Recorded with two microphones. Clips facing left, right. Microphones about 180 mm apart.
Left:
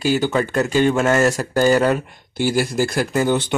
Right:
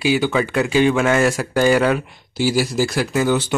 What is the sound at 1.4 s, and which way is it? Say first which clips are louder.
Speech: even; 40° left (ahead or behind).